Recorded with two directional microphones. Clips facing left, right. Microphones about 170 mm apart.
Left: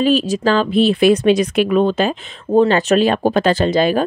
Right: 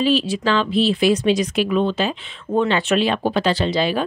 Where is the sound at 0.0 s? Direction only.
45° left (ahead or behind).